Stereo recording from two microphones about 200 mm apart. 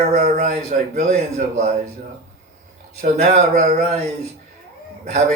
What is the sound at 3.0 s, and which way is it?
Speech, 35° right (ahead or behind).